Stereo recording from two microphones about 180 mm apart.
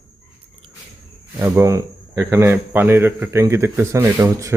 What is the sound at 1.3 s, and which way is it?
Speech, 15° right (ahead or behind).